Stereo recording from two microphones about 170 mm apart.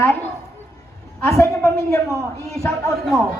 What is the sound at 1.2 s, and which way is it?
Speech, 15° left (ahead or behind).